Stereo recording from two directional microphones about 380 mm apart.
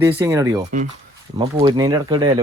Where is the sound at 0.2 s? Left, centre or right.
Centre.